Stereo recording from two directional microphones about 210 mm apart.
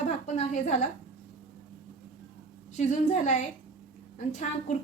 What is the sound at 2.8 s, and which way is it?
A woman's voice, 35° left (ahead or behind).